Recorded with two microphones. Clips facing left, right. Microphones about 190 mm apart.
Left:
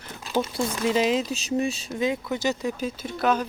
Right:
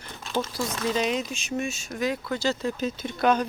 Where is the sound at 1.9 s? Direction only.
20° left (ahead or behind); by 3.4 s 5° left (ahead or behind).